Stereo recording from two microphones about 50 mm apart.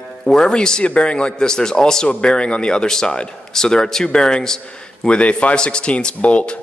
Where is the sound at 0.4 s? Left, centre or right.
Centre.